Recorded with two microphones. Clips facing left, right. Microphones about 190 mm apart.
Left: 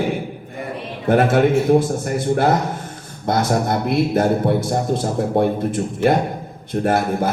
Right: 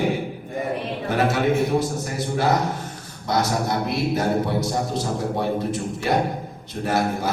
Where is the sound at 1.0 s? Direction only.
55° left (ahead or behind).